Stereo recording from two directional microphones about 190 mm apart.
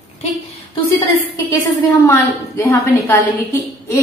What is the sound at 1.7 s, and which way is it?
A woman's voice, 15° left (ahead or behind).